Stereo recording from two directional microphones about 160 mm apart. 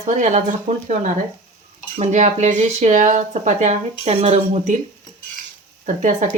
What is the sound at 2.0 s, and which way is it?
Speech, 45° right (ahead or behind).